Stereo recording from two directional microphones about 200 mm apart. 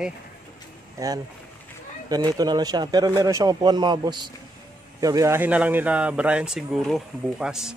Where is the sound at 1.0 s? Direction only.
15° right (ahead or behind).